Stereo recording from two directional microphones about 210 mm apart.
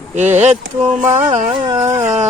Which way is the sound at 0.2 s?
35° right (ahead or behind).